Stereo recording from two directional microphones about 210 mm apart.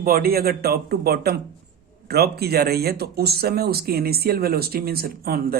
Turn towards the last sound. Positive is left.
turn(degrees=-45)  # may be behind; listen again after turning